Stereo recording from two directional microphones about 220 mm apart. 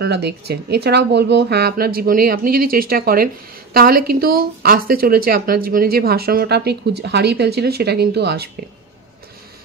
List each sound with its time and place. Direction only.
0.0 s speech: 50° right (ahead or behind)